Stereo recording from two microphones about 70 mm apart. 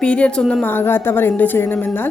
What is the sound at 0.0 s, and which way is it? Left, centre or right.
Speech, centre.